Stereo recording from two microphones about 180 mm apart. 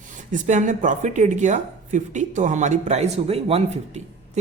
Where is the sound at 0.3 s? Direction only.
45° right (ahead or behind).